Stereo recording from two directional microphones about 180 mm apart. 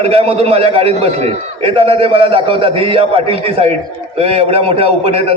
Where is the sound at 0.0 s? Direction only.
35° right (ahead or behind).